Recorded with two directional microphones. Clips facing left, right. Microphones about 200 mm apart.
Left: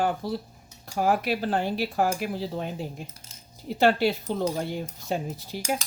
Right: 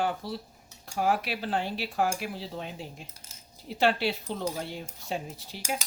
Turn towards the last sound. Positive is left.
turn(degrees=45)  # may be behind; listen again after turning